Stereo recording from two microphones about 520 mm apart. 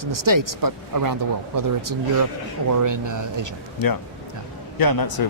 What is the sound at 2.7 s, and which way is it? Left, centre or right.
Speech, right.